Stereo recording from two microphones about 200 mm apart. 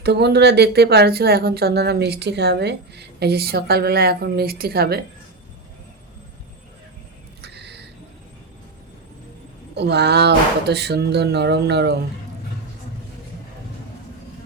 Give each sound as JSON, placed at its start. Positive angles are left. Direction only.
{"t": 0.0, "sound": "speech", "side_deg": -55}
{"t": 7.4, "sound": "a sound", "side_deg": -55}
{"t": 9.7, "sound": "speech", "side_deg": -60}